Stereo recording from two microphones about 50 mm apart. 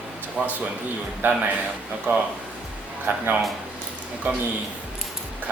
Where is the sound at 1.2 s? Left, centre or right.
Right.